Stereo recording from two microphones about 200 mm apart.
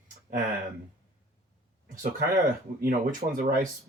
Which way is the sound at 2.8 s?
45° right (ahead or behind).